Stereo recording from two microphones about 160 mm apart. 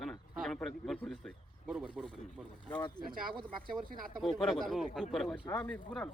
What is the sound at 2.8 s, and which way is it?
Speech, 25° left (ahead or behind).